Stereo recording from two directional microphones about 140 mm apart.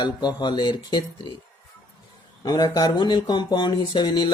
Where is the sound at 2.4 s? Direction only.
30° left (ahead or behind).